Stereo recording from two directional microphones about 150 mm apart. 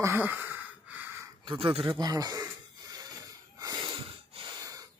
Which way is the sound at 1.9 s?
25° right (ahead or behind).